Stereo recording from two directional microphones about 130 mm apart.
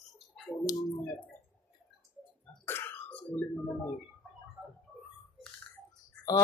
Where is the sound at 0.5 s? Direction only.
10° left (ahead or behind).